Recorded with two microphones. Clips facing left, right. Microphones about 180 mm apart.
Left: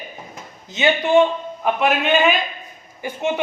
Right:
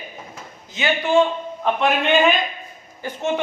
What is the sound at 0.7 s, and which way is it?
Speech, 20° left (ahead or behind).